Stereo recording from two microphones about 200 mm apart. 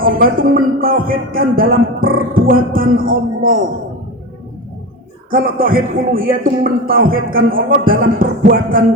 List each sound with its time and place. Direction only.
0.0 s speech: 45° right (ahead or behind)
5.3 s speech: 45° right (ahead or behind)